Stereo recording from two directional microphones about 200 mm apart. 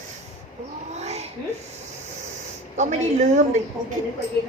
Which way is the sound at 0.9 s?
35° right (ahead or behind).